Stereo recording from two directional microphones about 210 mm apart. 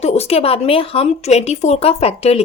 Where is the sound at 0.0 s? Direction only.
30° left (ahead or behind).